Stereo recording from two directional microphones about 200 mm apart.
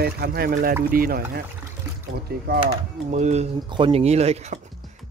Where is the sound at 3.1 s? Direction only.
35° right (ahead or behind).